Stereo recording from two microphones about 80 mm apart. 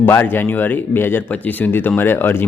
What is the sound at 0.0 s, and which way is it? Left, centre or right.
Speech, left.